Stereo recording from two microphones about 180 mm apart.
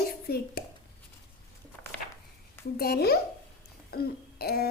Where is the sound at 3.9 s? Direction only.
60° left (ahead or behind).